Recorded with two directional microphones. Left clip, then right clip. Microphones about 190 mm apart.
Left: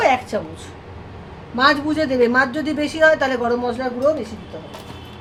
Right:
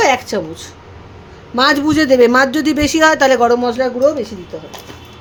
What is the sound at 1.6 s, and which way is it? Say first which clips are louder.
Speech: right 4 dB; 65° right (ahead or behind).